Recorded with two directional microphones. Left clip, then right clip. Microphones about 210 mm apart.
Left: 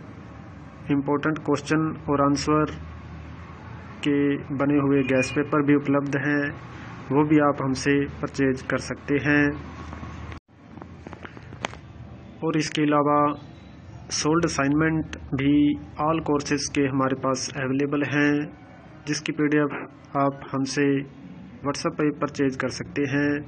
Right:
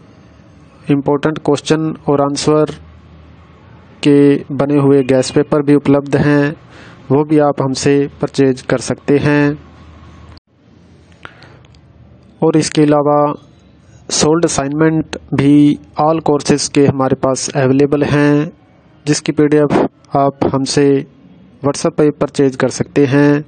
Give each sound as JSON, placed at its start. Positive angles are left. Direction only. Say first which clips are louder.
{"t": 0.8, "sound": "speech", "louder": "right 10 dB", "side_deg": -60}
{"t": 4.0, "sound": "speech", "louder": "right 14 dB", "side_deg": -65}
{"t": 12.4, "sound": "speech", "louder": "right 13 dB", "side_deg": -60}